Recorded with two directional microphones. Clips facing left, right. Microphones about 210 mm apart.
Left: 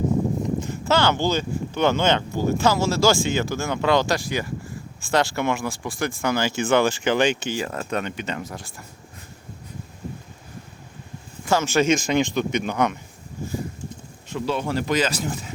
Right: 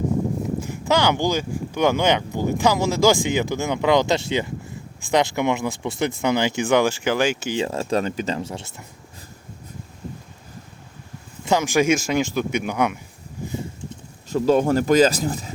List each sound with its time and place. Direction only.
0.6 s speech: 15° right (ahead or behind)
7.5 s speech: 25° right (ahead or behind)
11.4 s speech: 15° right (ahead or behind)
14.3 s speech: 40° right (ahead or behind)